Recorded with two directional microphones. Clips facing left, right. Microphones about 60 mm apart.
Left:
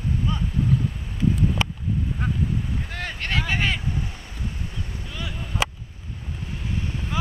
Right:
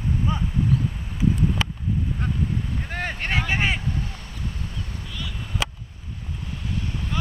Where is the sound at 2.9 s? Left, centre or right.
Right.